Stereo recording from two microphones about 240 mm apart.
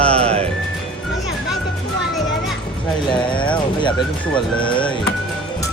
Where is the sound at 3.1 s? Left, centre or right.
Centre.